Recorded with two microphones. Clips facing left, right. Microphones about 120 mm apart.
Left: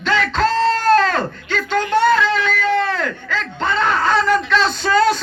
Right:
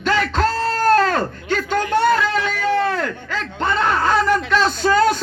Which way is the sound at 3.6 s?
15° right (ahead or behind).